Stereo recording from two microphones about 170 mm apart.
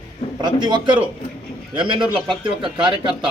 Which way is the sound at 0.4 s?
25° right (ahead or behind).